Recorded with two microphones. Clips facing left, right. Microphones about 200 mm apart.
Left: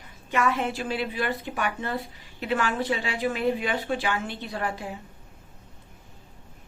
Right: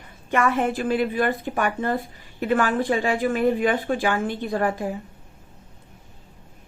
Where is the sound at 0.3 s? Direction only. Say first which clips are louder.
Right 4 dB; 50° right (ahead or behind).